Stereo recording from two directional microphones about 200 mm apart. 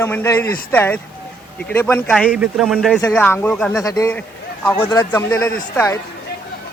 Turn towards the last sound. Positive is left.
turn(degrees=10)  # may be behind; listen again after turning